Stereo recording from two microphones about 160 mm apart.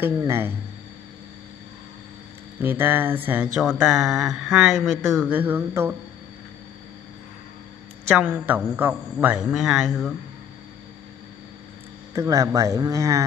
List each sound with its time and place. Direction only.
0.0 s a man's voice: 15° right (ahead or behind)
2.6 s a man's voice: 15° right (ahead or behind)
8.2 s a man's voice: 10° right (ahead or behind)
12.1 s speech: 20° right (ahead or behind)